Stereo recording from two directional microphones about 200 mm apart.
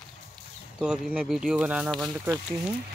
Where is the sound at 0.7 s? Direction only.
5° right (ahead or behind).